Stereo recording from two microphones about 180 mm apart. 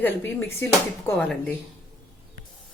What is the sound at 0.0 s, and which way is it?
A woman's voice, 10° left (ahead or behind).